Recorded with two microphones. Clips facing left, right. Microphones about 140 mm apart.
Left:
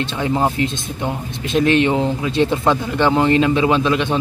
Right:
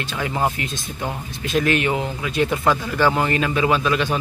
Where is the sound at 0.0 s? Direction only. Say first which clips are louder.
Left 4 dB; 25° left (ahead or behind).